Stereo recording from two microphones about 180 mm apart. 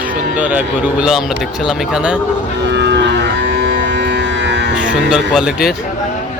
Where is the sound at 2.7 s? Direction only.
75° right (ahead or behind).